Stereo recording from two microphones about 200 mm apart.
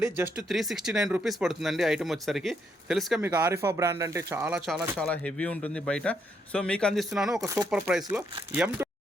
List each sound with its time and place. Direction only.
0.0 s speech: 5° right (ahead or behind)
3.2 s speech: 15° right (ahead or behind)
7.4 s speech: 15° right (ahead or behind)
7.7 s speech: 5° right (ahead or behind)